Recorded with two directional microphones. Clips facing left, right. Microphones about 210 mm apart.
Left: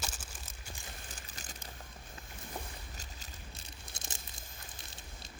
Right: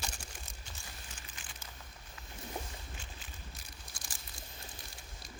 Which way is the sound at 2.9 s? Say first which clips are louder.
Right 1 dB; 40° left (ahead or behind).